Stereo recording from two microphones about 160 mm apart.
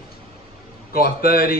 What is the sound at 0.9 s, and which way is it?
Speech, 70° left (ahead or behind).